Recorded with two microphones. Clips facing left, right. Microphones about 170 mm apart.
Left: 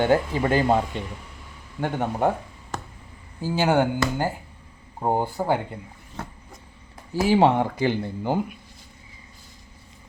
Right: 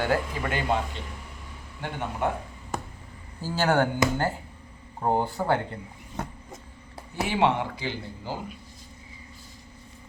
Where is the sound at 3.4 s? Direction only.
10° left (ahead or behind).